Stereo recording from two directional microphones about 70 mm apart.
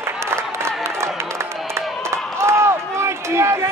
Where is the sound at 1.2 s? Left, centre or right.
Right.